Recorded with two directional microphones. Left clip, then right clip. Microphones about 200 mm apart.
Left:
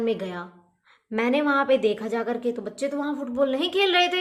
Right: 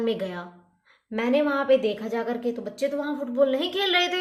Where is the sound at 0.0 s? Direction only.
15° left (ahead or behind).